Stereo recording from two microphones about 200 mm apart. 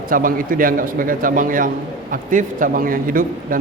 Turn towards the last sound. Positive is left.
turn(degrees=-45)  # may be behind; listen again after turning